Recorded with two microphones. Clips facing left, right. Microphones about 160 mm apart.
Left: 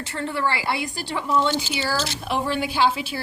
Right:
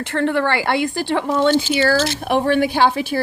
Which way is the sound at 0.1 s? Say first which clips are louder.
Right 7 dB; 70° right (ahead or behind).